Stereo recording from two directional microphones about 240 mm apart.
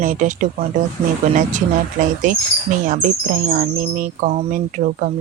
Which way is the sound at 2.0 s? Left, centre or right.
Right.